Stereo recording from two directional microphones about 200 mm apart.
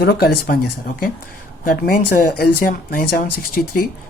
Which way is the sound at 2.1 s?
45° left (ahead or behind).